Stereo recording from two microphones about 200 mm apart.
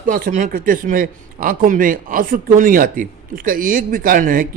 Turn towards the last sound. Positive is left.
turn(degrees=-45)  # may be behind; listen again after turning